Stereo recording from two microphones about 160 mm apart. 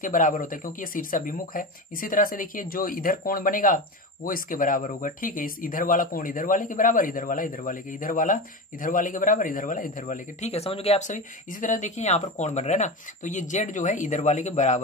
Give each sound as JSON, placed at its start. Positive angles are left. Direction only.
{"t": 0.0, "sound": "speech", "side_deg": 55}
{"t": 10.5, "sound": "speech", "side_deg": 40}